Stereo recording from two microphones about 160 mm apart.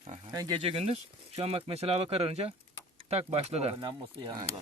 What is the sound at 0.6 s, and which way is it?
Speech, 35° right (ahead or behind).